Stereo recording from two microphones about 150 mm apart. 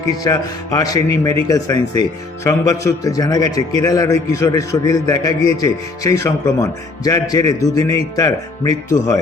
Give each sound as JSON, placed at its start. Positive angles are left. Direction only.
{"t": 0.3, "sound": "speech", "side_deg": 25}